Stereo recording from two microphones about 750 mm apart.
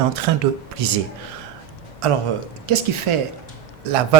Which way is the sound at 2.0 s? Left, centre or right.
Right.